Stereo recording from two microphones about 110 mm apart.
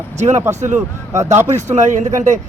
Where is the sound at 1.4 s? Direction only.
90° right.